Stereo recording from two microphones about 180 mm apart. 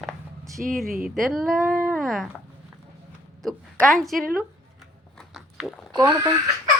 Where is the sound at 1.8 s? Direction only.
Centre (ahead or behind).